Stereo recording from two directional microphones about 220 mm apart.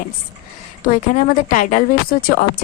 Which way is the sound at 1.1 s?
35° left (ahead or behind).